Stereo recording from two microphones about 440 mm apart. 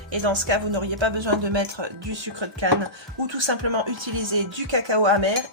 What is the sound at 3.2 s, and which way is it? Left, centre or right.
Speech, right.